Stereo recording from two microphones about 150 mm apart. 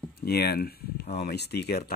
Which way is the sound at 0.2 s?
90° left.